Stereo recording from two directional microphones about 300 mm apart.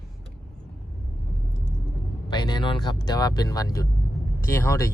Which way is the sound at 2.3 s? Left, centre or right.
Centre.